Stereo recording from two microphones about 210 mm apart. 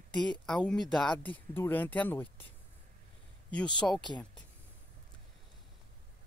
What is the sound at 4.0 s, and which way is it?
Speech, 20° left (ahead or behind).